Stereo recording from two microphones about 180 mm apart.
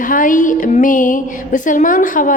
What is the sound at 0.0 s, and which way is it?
A woman's voice, 50° left (ahead or behind).